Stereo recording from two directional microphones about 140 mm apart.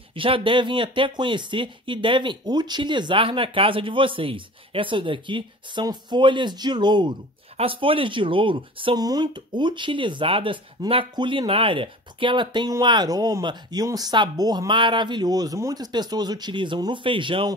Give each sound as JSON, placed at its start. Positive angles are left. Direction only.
{"t": 0.1, "sound": "speech", "side_deg": -40}